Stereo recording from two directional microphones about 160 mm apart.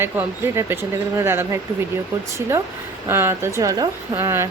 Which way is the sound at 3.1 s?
15° right (ahead or behind).